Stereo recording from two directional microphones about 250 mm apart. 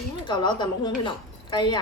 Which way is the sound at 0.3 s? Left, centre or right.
Centre.